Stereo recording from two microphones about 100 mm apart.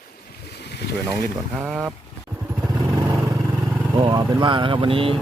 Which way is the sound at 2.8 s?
45° right (ahead or behind).